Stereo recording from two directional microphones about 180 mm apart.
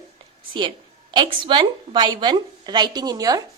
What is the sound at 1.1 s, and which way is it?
Speech, 25° right (ahead or behind).